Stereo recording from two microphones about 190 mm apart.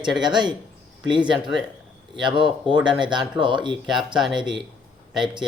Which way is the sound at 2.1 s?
25° right (ahead or behind).